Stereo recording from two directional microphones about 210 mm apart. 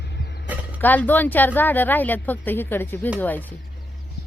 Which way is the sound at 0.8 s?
10° left (ahead or behind).